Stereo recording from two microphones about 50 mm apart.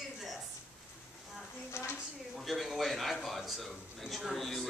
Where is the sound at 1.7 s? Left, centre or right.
Left.